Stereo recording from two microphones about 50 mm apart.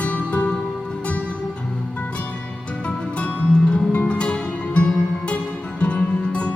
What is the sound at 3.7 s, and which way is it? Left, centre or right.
Music, left.